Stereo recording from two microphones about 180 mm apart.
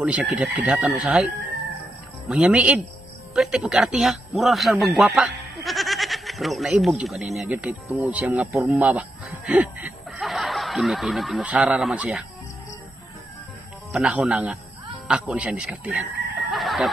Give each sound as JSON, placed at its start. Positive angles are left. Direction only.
{"t": 0.0, "sound": "speech", "side_deg": -5}
{"t": 9.5, "sound": "snicker", "side_deg": -10}
{"t": 13.9, "sound": "speech", "side_deg": -5}
{"t": 16.4, "sound": "fowl", "side_deg": 0}